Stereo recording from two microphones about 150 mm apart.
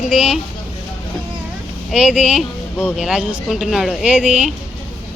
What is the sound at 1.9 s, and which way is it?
Speech, 5° right (ahead or behind).